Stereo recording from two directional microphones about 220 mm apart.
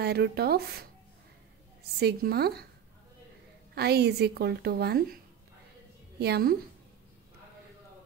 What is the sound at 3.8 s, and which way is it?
A woman's voice, 45° right (ahead or behind).